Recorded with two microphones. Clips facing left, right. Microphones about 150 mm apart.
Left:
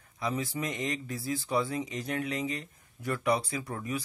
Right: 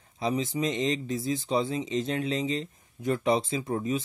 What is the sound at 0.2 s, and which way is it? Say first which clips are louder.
Speech: right 5 dB; 20° right (ahead or behind).